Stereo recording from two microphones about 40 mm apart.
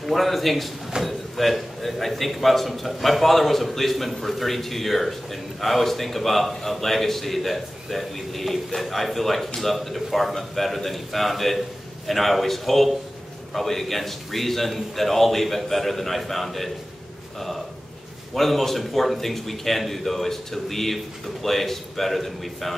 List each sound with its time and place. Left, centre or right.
0.0 s a man's voice: centre
18.3 s a man's voice: centre